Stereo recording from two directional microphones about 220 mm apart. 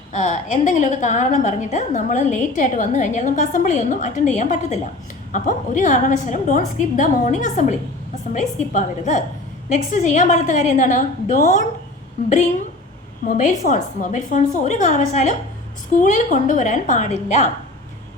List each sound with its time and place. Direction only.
0.1 s a woman's voice: 35° left (ahead or behind)
13.2 s a woman's voice: 35° left (ahead or behind)